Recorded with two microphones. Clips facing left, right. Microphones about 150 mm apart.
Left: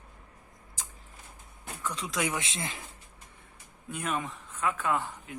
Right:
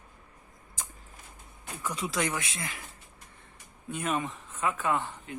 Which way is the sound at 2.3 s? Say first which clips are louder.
Left 1 dB; 25° left (ahead or behind).